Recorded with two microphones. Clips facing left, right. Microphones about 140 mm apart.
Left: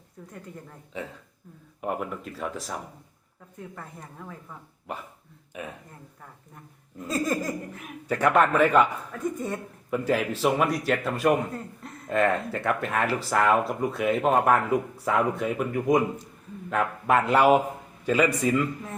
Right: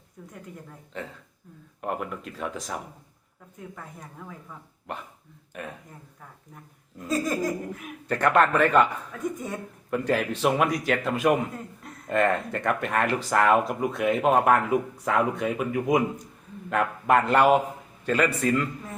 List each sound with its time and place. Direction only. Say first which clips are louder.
0.2 s speech: even; 5° right (ahead or behind)
0.9 s a man's voice: left 1 dB; 10° left (ahead or behind)
4.2 s speech: left 1 dB; centre (ahead or behind)
8.0 s a man's voice: even; 10° left (ahead or behind)